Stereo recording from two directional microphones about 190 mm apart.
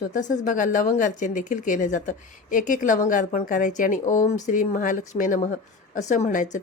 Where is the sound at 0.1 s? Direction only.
40° left (ahead or behind).